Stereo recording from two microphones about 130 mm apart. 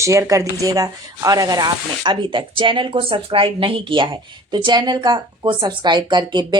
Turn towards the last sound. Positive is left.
turn(degrees=-35)  # may be behind; listen again after turning